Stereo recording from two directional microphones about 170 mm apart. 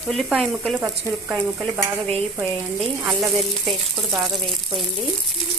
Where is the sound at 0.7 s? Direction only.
10° right (ahead or behind).